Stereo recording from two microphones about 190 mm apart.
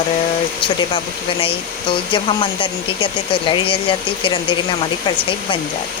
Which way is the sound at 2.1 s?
25° left (ahead or behind).